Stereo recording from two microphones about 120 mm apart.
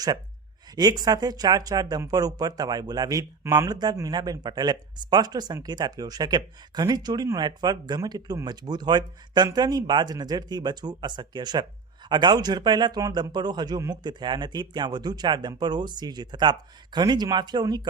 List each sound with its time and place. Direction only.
0.8 s a man's voice: 35° right (ahead or behind)